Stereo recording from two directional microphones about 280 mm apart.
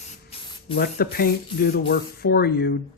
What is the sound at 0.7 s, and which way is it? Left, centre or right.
Speech, left.